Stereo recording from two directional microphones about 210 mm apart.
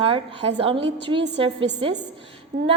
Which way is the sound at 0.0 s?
25° right (ahead or behind).